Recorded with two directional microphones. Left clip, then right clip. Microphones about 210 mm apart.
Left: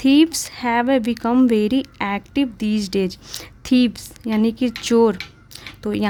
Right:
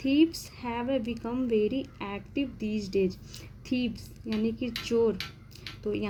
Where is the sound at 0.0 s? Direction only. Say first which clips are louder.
Left 10 dB; 40° left (ahead or behind).